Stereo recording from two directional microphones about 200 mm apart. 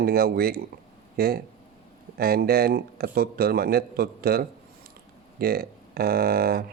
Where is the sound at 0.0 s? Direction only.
50° right (ahead or behind).